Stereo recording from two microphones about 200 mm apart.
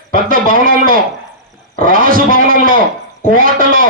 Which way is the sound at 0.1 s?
45° right (ahead or behind).